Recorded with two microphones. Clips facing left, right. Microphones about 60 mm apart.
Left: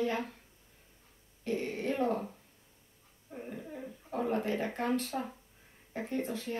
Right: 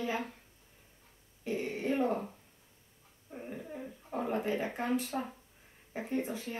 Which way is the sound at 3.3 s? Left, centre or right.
Centre.